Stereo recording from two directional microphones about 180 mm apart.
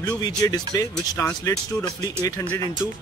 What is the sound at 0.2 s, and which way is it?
Speech, 20° left (ahead or behind).